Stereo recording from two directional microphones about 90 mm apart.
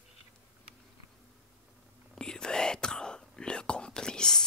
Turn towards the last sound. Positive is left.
turn(degrees=5)  # may be behind; listen again after turning